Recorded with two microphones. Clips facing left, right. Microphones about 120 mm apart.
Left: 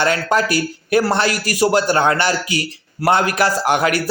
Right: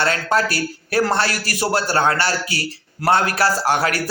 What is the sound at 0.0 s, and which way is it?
A man's voice, 15° left (ahead or behind).